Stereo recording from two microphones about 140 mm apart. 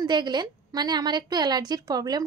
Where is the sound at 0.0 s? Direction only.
30° right (ahead or behind).